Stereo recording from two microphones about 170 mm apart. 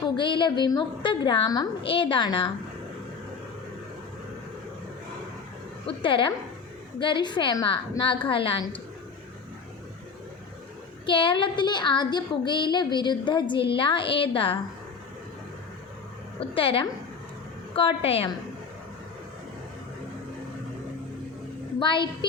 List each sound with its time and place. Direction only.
0.2 s a woman's voice: 30° left (ahead or behind)
5.8 s a woman's voice: 30° left (ahead or behind)
11.0 s a woman's voice: 30° left (ahead or behind)
16.4 s a woman's voice: 30° left (ahead or behind)
21.8 s a woman's voice: 30° left (ahead or behind)